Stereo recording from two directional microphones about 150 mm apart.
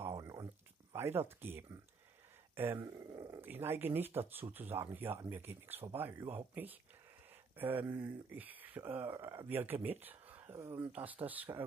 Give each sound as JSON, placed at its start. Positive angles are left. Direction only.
{"t": 0.1, "sound": "a sound", "side_deg": -25}
{"t": 0.9, "sound": "speech", "side_deg": -15}
{"t": 2.5, "sound": "growling", "side_deg": -15}
{"t": 3.4, "sound": "speech", "side_deg": -15}